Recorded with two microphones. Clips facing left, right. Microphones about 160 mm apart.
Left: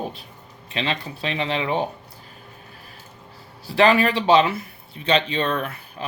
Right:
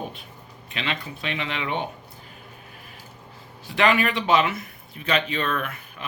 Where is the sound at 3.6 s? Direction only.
35° left (ahead or behind).